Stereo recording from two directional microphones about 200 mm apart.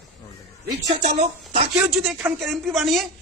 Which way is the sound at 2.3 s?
Centre (ahead or behind).